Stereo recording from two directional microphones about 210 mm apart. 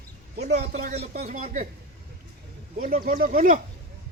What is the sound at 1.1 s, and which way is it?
Speech, 35° right (ahead or behind).